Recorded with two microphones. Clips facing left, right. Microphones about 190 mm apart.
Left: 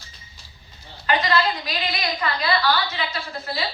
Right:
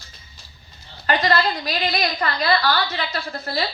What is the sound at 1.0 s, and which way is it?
A woman's voice, 40° right (ahead or behind).